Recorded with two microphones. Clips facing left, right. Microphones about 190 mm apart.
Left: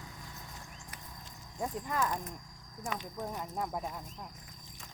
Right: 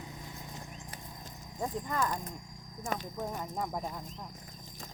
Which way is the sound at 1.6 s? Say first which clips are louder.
Right 1 dB; centre (ahead or behind).